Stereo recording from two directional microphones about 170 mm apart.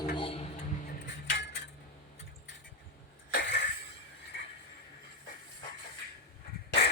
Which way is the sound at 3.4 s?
90° left.